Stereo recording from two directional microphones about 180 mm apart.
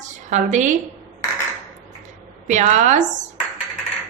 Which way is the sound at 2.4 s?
40° right (ahead or behind).